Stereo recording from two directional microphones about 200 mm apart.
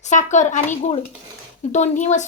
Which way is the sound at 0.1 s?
35° left (ahead or behind).